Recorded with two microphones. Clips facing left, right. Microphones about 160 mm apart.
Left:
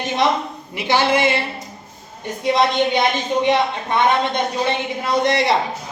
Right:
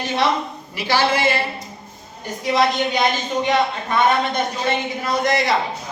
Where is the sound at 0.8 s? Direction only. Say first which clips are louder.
Left 2 dB; 20° left (ahead or behind).